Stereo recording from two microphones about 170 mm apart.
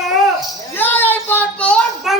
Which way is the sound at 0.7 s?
10° left (ahead or behind).